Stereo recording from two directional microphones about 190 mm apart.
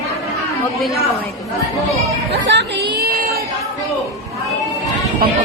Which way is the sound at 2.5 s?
60° right (ahead or behind).